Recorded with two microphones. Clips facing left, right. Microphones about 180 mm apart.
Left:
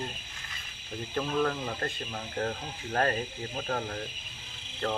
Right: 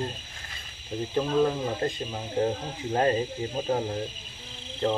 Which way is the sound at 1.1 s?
20° right (ahead or behind).